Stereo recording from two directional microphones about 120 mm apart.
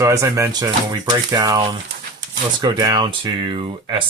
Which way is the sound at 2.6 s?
35° right (ahead or behind).